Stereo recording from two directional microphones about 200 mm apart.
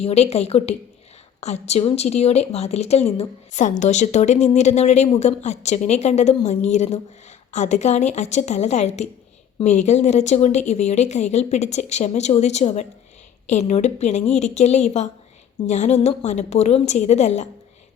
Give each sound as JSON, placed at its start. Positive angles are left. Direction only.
{"t": 0.0, "sound": "speech", "side_deg": 30}